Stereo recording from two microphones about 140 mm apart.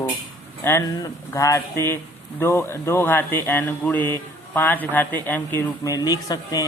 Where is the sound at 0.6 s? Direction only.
20° left (ahead or behind).